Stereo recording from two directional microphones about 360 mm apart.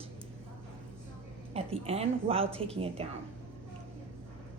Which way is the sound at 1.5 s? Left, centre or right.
Centre.